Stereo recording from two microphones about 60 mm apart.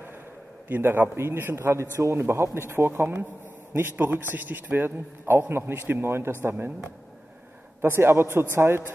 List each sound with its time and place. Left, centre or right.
0.7 s a man's voice: right
7.8 s speech: right